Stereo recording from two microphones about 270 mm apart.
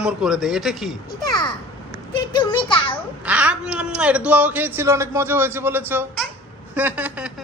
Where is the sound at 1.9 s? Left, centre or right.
Centre.